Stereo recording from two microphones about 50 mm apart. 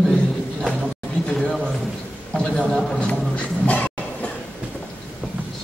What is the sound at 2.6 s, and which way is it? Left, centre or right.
Speech, centre.